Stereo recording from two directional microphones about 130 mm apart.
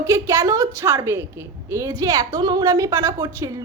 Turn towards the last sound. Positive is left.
turn(degrees=-20)  # may be behind; listen again after turning